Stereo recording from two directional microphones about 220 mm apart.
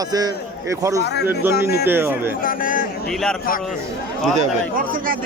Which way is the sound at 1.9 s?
10° right (ahead or behind).